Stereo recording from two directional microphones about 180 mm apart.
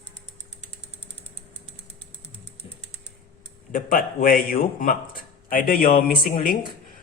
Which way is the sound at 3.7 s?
50° left (ahead or behind).